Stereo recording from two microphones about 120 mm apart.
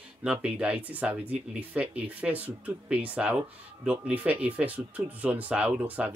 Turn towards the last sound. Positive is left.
turn(degrees=-10)  # may be behind; listen again after turning